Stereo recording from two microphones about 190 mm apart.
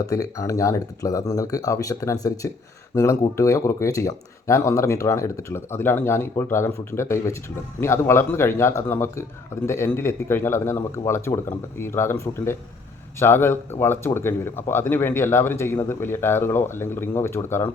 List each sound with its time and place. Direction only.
0.0 s speech: 15° left (ahead or behind)